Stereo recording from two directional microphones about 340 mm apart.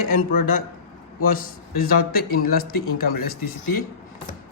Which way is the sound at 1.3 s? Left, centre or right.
Left.